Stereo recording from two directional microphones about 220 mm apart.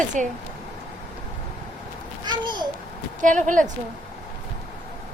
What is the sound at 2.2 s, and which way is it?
Babbling, 20° right (ahead or behind).